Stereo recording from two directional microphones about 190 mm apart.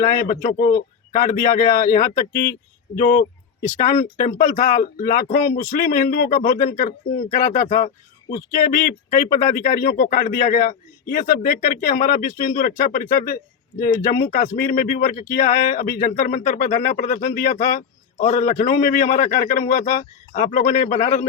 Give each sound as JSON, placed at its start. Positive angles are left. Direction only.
{"t": 0.1, "sound": "speech", "side_deg": 50}